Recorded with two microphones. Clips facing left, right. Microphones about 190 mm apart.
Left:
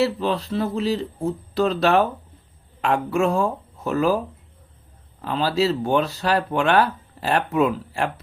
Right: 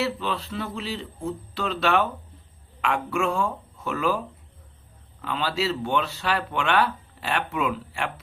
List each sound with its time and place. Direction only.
0.0 s speech: 40° left (ahead or behind)
5.2 s speech: 40° left (ahead or behind)